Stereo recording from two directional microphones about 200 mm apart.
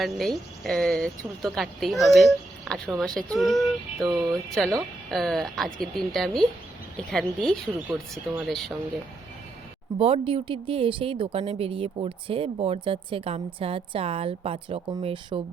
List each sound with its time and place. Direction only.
0.0 s speech: centre (ahead or behind)
10.0 s speech: 25° right (ahead or behind)